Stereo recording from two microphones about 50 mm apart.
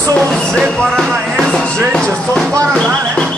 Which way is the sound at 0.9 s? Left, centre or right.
Centre.